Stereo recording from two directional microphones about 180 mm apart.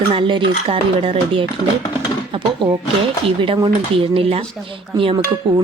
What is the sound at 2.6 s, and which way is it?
A woman's voice, 30° right (ahead or behind).